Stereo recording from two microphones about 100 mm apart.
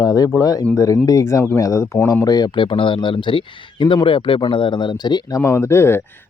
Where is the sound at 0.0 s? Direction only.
35° left (ahead or behind).